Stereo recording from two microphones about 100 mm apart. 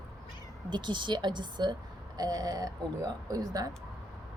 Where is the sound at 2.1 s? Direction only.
40° right (ahead or behind).